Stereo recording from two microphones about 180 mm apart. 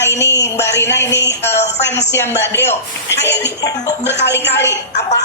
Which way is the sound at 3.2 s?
15° right (ahead or behind).